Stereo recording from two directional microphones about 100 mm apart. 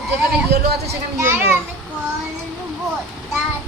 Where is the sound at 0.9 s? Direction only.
20° right (ahead or behind).